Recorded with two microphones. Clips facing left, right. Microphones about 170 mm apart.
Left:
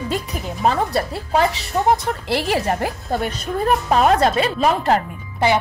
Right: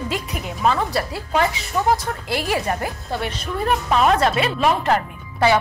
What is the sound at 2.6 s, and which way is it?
Speech, 40° left (ahead or behind).